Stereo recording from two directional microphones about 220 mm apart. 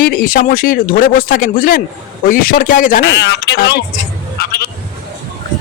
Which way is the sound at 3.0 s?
50° left (ahead or behind).